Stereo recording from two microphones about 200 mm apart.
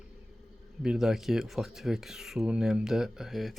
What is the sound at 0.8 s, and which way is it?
Speech, centre (ahead or behind).